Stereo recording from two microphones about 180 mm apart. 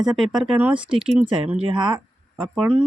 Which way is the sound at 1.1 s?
35° right (ahead or behind).